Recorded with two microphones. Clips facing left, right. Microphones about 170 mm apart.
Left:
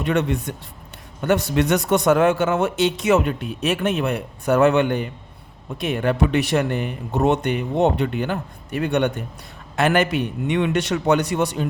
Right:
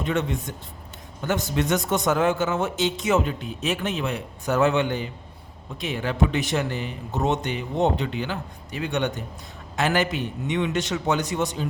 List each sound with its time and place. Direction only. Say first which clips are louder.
0.0 s a man's voice: left 4 dB; 65° left (ahead or behind)